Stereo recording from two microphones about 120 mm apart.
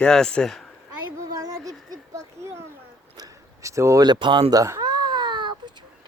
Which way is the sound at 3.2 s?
25° right (ahead or behind).